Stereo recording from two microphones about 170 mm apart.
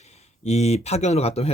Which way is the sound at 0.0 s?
40° left (ahead or behind).